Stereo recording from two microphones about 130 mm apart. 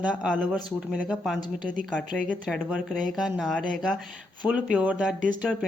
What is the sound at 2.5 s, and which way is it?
A woman's voice, centre (ahead or behind).